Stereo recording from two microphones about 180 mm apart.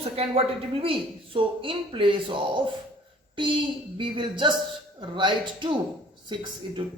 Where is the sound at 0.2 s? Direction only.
30° right (ahead or behind).